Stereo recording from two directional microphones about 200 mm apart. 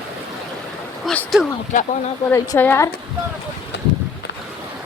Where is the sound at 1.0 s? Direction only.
5° left (ahead or behind).